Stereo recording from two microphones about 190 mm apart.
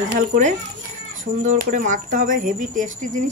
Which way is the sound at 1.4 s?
40° right (ahead or behind).